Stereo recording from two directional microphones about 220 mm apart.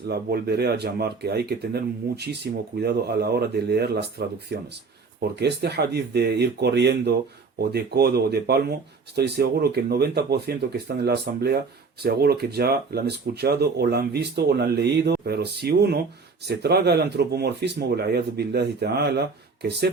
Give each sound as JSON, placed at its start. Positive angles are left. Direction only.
{"t": 0.1, "sound": "speech", "side_deg": -50}